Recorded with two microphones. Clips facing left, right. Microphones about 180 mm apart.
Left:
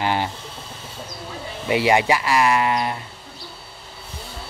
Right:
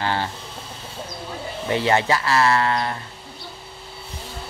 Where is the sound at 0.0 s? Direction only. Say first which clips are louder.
Left 2 dB; 15° left (ahead or behind).